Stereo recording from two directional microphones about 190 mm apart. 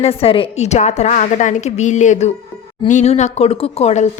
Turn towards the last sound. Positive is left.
turn(degrees=35)  # may be behind; listen again after turning